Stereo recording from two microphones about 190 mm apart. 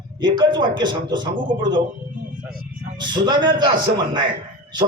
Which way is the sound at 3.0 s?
25° right (ahead or behind).